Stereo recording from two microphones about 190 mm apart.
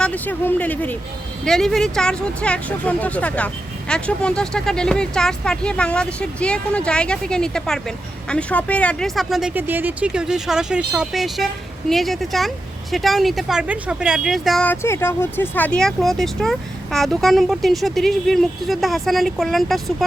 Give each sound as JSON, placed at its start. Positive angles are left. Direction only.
{"t": 0.0, "sound": "speech", "side_deg": 10}